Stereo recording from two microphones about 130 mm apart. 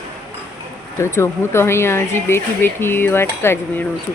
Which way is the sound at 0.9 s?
20° left (ahead or behind).